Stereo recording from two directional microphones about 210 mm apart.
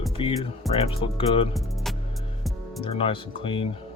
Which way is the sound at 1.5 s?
Centre (ahead or behind).